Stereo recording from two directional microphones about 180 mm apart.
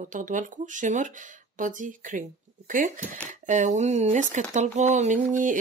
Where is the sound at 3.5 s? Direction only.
40° right (ahead or behind).